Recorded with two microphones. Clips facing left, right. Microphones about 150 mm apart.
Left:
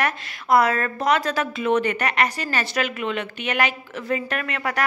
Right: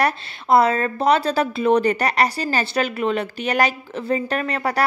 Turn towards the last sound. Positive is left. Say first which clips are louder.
# right 4 dB
turn(degrees=-35)  # may be behind; listen again after turning